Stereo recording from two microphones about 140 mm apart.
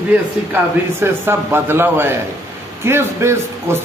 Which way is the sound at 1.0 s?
20° right (ahead or behind).